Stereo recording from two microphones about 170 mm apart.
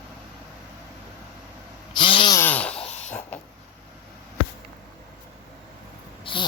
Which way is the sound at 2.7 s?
40° left (ahead or behind).